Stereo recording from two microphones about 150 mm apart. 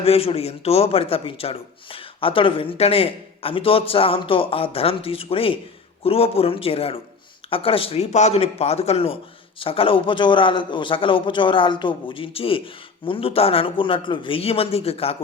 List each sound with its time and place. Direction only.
0.0 s speech: 40° left (ahead or behind)